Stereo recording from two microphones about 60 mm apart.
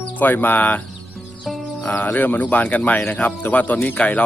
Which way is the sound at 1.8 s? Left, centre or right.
Left.